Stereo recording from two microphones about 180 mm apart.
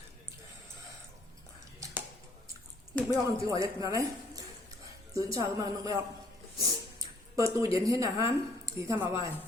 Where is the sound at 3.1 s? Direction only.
20° right (ahead or behind).